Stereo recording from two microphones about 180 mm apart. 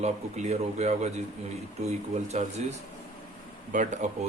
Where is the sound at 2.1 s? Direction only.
40° right (ahead or behind).